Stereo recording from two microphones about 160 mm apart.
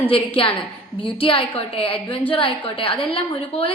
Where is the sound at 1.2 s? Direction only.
35° left (ahead or behind).